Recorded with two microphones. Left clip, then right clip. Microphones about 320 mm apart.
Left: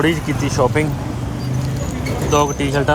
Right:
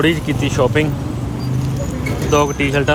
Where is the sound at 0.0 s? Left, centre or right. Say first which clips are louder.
Right 1 dB; centre.